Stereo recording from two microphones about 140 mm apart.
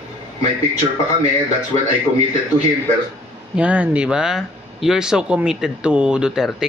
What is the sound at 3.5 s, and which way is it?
Speech, 10° right (ahead or behind).